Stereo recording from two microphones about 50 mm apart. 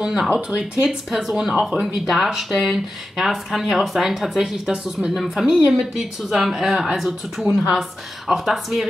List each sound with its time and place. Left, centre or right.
0.0 s speech: centre
0.8 s speech: centre